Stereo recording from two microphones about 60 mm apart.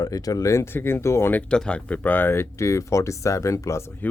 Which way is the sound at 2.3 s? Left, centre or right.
Left.